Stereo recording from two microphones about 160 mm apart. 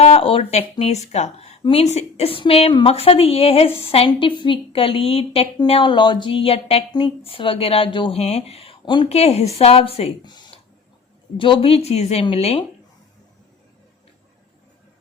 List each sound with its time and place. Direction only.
0.0 s speech: 35° left (ahead or behind)